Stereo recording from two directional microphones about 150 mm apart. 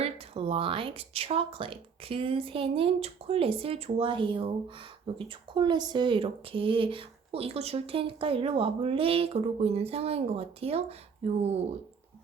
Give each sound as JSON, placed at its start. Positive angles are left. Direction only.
{"t": 0.0, "sound": "speech", "side_deg": -40}